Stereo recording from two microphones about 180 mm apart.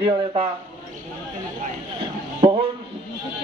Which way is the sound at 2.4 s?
25° right (ahead or behind).